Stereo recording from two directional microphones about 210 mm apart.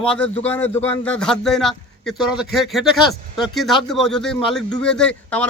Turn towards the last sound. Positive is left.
turn(degrees=5)  # may be behind; listen again after turning